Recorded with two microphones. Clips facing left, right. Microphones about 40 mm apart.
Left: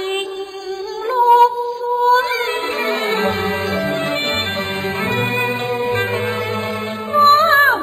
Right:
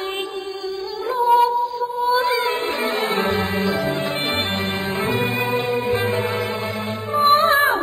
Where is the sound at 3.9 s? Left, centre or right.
Left.